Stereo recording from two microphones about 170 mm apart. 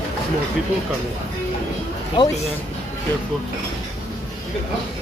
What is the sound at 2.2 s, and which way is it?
Speech, 25° left (ahead or behind).